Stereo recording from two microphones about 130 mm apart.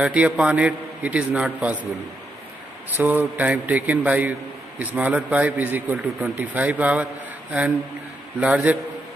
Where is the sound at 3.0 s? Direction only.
15° right (ahead or behind).